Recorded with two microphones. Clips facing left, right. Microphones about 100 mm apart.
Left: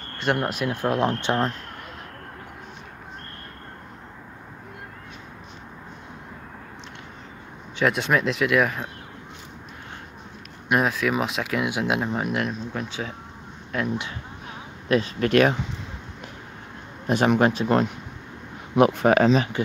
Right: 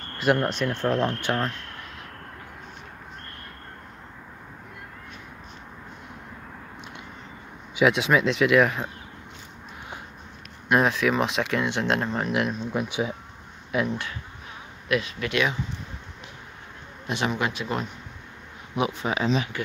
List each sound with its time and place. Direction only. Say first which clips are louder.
0.4 s speech: even; 10° left (ahead or behind)
1.2 s speech: left 3 dB; 20° left (ahead or behind)
7.7 s speech: right 1 dB; 5° right (ahead or behind)
10.7 s speech: right 1 dB; centre (ahead or behind)
12.3 s speech: right 1 dB; centre (ahead or behind)
14.9 s speech: left 5 dB; 35° left (ahead or behind)
17.4 s speech: left 8 dB; 35° left (ahead or behind)
17.6 s speech: left 8 dB; 60° left (ahead or behind); by 19.5 s 45° left (ahead or behind)